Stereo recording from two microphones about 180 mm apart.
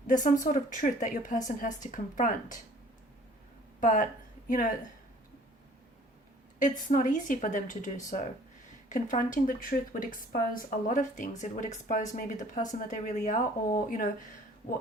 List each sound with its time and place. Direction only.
0.1 s speech: 45° left (ahead or behind)
3.8 s speech: 45° left (ahead or behind)
6.6 s speech: 45° left (ahead or behind)